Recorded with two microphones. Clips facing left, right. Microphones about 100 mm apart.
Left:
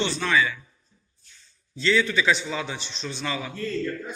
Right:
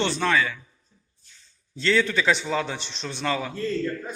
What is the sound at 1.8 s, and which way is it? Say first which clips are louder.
A man's voice: even; 55° right (ahead or behind).